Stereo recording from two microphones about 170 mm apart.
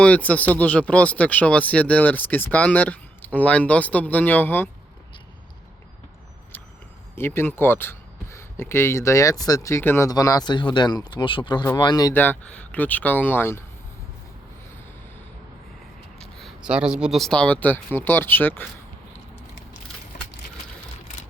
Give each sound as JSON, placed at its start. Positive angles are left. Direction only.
{"t": 0.0, "sound": "speech", "side_deg": 10}
{"t": 7.2, "sound": "speech", "side_deg": 15}
{"t": 12.1, "sound": "speech", "side_deg": 10}
{"t": 16.2, "sound": "a sound", "side_deg": 0}
{"t": 16.6, "sound": "speech", "side_deg": -5}